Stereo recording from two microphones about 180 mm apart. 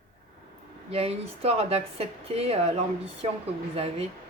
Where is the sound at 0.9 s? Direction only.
35° right (ahead or behind).